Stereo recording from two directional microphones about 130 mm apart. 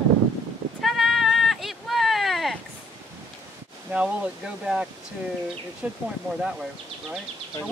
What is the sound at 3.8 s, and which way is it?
Speech, 10° right (ahead or behind).